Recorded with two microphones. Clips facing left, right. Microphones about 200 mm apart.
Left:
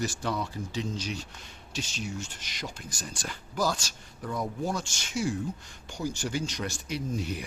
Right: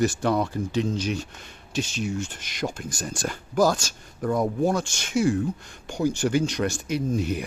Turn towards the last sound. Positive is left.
turn(degrees=-55)  # may be behind; listen again after turning